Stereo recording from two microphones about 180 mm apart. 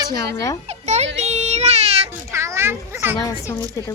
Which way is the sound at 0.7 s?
40° right (ahead or behind).